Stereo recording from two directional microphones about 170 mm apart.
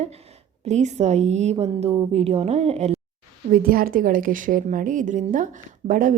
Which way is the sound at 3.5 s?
60° right (ahead or behind).